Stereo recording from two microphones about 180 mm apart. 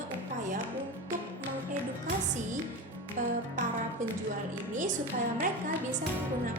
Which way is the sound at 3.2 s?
45° right (ahead or behind).